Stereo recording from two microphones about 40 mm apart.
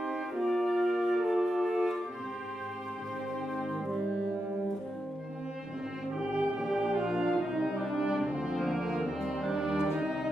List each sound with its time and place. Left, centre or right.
0.0 s french horn: centre
0.7 s music: centre
6.1 s music: right
6.7 s music: centre